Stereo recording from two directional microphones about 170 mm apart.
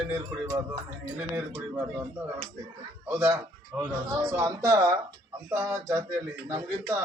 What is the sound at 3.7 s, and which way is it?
Speech, 5° left (ahead or behind).